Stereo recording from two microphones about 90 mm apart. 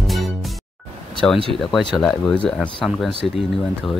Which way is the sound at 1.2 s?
15° left (ahead or behind).